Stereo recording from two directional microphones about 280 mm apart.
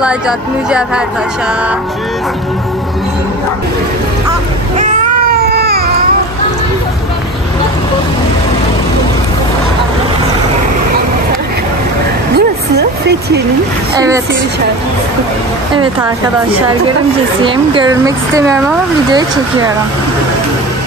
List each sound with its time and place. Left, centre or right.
0.7 s speech: centre
5.5 s baby cry: right
12.4 s a sound: right
17.4 s speech: centre